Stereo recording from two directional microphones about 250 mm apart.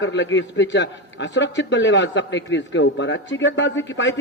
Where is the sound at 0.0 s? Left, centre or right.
Left.